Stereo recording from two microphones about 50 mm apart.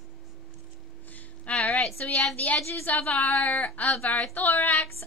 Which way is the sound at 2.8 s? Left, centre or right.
Left.